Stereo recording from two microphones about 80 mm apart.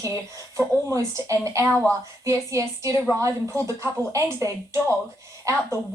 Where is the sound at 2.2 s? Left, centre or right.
Right.